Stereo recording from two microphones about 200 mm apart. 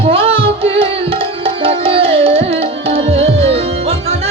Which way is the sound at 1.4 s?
30° right (ahead or behind).